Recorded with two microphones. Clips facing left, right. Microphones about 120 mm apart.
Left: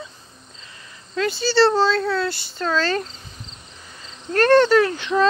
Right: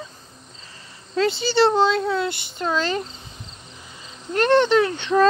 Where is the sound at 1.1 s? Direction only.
25° right (ahead or behind).